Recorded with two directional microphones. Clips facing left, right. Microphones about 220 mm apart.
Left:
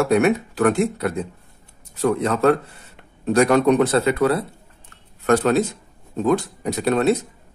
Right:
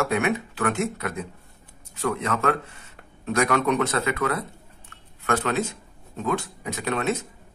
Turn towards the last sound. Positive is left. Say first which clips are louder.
# left 8 dB
turn(degrees=35)  # may be behind; listen again after turning